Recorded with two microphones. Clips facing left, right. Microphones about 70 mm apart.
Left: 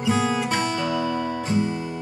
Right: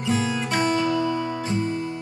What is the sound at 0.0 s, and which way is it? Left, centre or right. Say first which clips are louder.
Music: left 2 dB; centre.